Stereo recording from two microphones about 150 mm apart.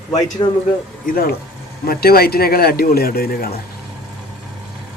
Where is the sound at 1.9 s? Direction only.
90° left.